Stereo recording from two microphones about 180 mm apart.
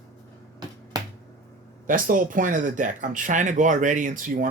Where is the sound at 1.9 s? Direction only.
50° right (ahead or behind).